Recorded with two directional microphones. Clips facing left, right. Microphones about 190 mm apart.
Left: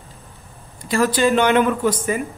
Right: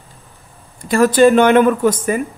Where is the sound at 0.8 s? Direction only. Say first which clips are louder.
Right 7 dB; 50° right (ahead or behind).